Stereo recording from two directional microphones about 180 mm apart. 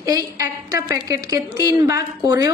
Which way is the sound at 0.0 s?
20° right (ahead or behind).